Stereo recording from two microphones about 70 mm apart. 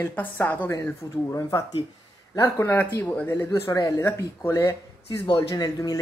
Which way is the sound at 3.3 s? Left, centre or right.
Left.